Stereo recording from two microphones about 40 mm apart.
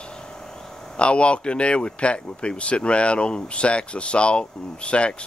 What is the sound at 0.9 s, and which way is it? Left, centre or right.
Speech, left.